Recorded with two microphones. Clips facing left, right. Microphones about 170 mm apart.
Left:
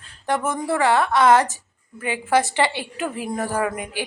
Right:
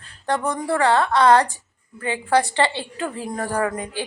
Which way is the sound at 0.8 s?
15° left (ahead or behind).